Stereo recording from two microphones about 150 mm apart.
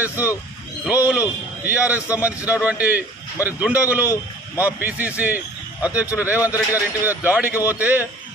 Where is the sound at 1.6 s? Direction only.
10° right (ahead or behind).